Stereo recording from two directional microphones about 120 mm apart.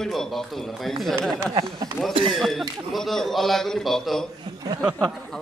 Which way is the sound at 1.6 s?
30° right (ahead or behind).